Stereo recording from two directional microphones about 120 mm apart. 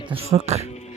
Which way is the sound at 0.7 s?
65° left (ahead or behind).